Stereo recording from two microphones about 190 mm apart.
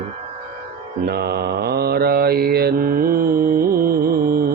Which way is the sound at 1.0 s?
55° right (ahead or behind).